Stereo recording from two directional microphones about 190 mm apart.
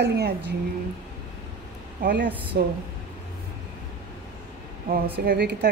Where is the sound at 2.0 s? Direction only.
50° right (ahead or behind).